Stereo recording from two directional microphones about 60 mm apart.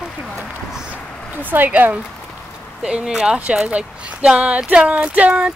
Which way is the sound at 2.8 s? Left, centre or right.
Centre.